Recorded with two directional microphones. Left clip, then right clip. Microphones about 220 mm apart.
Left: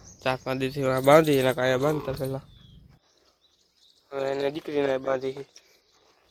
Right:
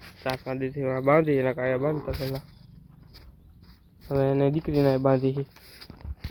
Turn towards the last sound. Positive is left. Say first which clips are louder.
# right 4 dB
turn(degrees=0)  # may be behind; listen again after turning